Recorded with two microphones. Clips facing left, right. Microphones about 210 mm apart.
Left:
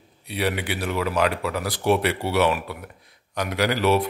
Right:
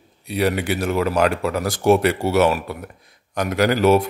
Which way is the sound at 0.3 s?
45° right (ahead or behind).